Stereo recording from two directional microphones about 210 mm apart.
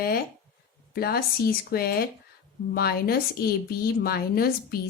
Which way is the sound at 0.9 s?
45° left (ahead or behind).